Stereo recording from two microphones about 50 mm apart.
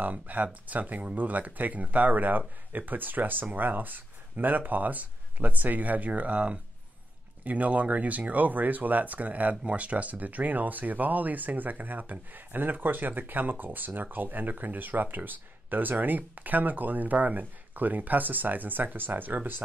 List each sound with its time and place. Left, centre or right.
0.0 s speech: right